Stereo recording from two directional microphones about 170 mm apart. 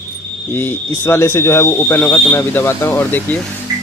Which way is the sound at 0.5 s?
15° left (ahead or behind).